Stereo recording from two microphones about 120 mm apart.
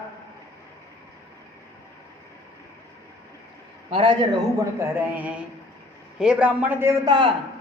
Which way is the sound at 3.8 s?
40° right (ahead or behind).